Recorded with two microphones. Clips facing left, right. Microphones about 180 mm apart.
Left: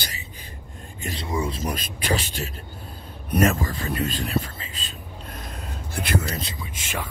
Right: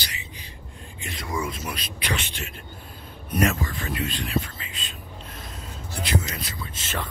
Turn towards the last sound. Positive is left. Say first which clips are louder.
# even
turn(degrees=10)  # may be behind; listen again after turning